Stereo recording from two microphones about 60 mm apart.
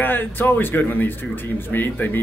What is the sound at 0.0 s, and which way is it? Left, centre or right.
A man's voice, left.